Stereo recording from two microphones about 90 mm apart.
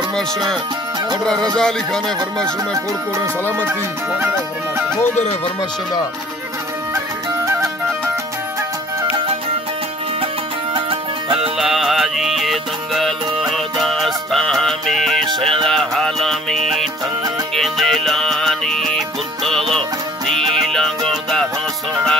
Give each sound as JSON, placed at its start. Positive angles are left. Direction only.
{"t": 1.2, "sound": "music", "side_deg": 5}
{"t": 7.4, "sound": "music", "side_deg": -35}
{"t": 10.7, "sound": "music", "side_deg": -80}
{"t": 11.5, "sound": "music", "side_deg": 0}